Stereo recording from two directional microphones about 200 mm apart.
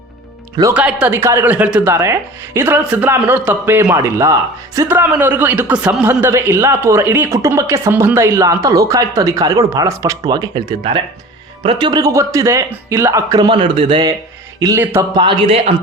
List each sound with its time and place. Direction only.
0.7 s a man's voice: 5° right (ahead or behind); by 14.1 s 25° right (ahead or behind)
14.6 s speech: 15° right (ahead or behind)
15.2 s a man's voice: 25° right (ahead or behind)